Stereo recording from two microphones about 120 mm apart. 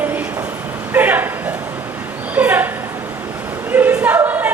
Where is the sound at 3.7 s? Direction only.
15° right (ahead or behind).